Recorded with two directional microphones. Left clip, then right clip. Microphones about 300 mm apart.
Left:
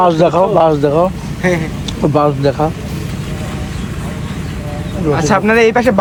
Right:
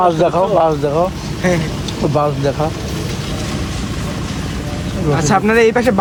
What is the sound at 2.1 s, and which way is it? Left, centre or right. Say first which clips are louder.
Speech: left 4 dB; left.